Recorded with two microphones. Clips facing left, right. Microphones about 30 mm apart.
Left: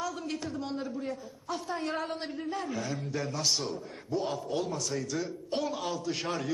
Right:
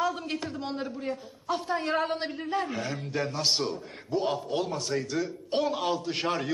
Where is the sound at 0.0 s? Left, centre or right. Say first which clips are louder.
Right 5 dB; right.